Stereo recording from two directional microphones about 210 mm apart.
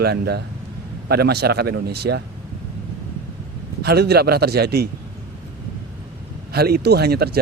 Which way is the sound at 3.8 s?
50° right (ahead or behind).